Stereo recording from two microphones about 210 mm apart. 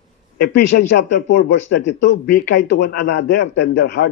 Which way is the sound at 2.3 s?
45° left (ahead or behind).